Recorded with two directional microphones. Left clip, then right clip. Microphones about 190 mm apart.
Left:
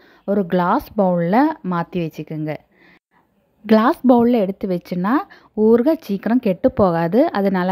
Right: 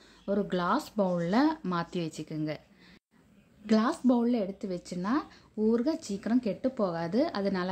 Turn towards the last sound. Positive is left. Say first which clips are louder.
# left 13 dB
turn(degrees=35)  # may be behind; listen again after turning